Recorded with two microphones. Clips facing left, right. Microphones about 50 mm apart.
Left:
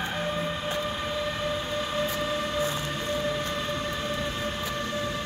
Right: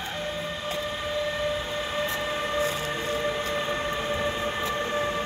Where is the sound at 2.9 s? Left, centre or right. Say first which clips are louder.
Right 1 dB; centre.